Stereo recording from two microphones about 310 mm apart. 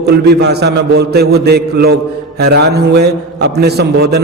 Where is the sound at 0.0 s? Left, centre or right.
Right.